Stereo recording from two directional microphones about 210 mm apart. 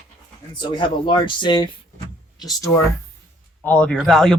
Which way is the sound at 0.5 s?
20° left (ahead or behind).